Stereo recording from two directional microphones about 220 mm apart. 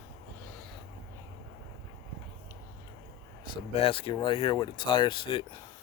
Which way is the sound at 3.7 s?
25° left (ahead or behind).